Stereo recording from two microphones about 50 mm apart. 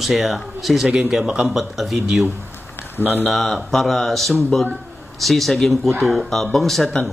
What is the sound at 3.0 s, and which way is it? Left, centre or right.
Speech, right.